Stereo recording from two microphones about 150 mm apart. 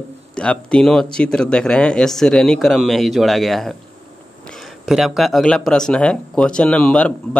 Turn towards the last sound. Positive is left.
turn(degrees=5)  # may be behind; listen again after turning